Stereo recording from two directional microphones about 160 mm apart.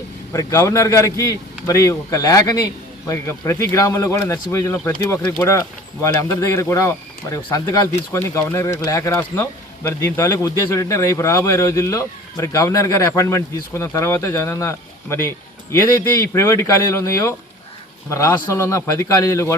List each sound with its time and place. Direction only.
0.3 s speech: 20° left (ahead or behind)